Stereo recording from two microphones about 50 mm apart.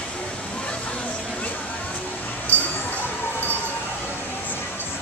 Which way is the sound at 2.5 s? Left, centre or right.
Left.